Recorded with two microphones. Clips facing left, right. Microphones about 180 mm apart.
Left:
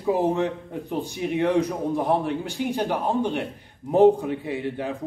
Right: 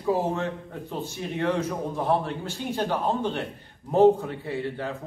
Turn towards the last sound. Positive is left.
turn(degrees=15)  # may be behind; listen again after turning